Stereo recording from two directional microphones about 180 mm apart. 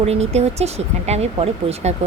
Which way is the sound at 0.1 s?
35° right (ahead or behind).